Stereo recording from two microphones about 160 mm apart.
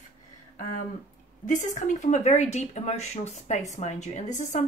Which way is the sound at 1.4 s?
50° left (ahead or behind).